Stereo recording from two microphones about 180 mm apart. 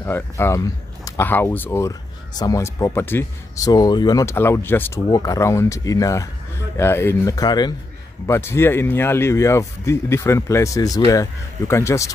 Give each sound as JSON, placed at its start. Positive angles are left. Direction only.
{"t": 0.0, "sound": "speech", "side_deg": 15}